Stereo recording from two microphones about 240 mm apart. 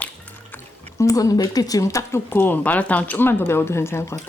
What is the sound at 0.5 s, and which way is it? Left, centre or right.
Speech, centre.